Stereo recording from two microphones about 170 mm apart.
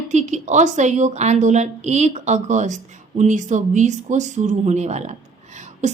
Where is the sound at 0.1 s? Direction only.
45° right (ahead or behind).